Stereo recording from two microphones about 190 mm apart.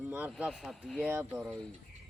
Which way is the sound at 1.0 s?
10° right (ahead or behind).